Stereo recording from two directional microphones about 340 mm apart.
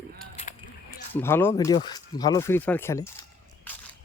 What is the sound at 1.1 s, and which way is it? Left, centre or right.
Speech, centre.